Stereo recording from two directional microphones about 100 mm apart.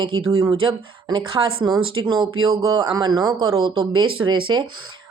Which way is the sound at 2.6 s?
45° right (ahead or behind).